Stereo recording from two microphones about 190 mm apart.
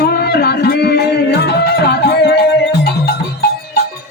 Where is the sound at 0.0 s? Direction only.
60° left (ahead or behind).